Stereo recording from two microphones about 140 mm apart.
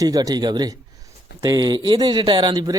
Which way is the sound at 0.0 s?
25° right (ahead or behind).